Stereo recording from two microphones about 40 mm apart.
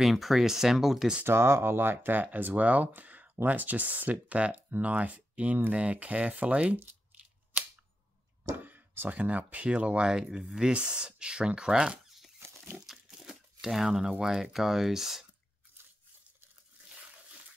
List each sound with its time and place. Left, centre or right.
0.0 s speech: centre
1.2 s speech: right
2.3 s speech: right
8.6 s a sound: right
9.2 s speech: right
9.7 s speech: right
10.1 s speech: centre
12.7 s crumpling: centre
14.2 s speech: centre